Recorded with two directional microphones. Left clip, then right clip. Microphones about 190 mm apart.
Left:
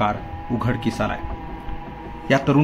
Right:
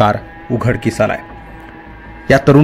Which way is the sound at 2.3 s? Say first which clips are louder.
Right 9 dB; 45° right (ahead or behind).